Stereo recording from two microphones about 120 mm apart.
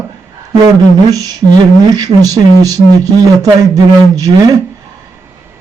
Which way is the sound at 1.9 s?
30° right (ahead or behind).